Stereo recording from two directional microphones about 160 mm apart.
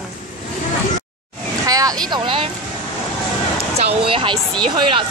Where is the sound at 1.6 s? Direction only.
20° right (ahead or behind).